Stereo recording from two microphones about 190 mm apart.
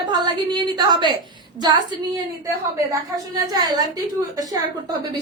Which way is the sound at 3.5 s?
20° right (ahead or behind).